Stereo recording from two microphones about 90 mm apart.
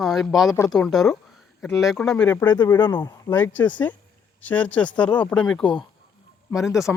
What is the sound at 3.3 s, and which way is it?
Speech, 20° left (ahead or behind).